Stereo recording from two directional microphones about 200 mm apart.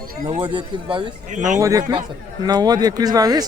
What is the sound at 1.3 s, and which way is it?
Speech, 40° right (ahead or behind).